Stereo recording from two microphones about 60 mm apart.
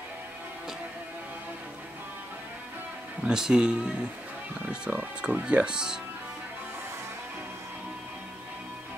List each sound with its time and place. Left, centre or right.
3.3 s speech: centre